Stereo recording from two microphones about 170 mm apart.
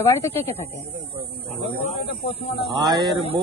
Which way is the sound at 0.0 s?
15° left (ahead or behind).